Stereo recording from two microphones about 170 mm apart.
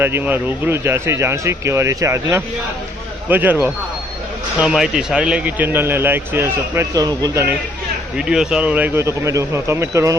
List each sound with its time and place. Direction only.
0.0 s speech: 10° right (ahead or behind)
8.2 s speech: 5° right (ahead or behind)